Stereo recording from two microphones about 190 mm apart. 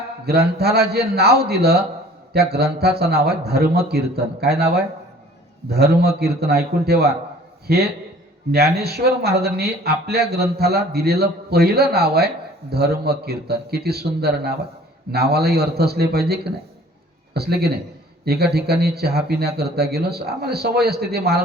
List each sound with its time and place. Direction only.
0.3 s speech: 55° right (ahead or behind)